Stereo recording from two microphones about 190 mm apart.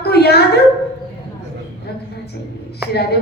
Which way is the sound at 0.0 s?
60° left (ahead or behind).